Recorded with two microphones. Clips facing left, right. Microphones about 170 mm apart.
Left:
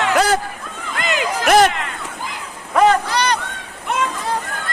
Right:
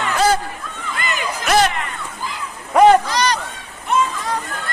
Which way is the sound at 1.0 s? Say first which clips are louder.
Left 5 dB; 90° left.